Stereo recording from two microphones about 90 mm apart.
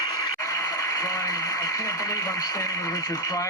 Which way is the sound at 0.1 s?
40° left (ahead or behind).